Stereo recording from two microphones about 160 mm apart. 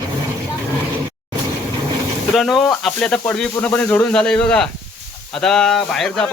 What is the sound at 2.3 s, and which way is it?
Speech, centre (ahead or behind).